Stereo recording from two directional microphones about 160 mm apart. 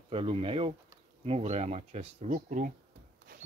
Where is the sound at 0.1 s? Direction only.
35° right (ahead or behind); by 2.7 s 50° right (ahead or behind).